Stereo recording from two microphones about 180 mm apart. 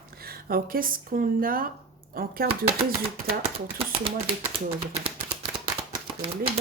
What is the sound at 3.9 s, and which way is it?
Speech, 30° right (ahead or behind).